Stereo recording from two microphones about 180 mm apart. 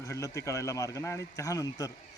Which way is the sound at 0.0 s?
15° left (ahead or behind).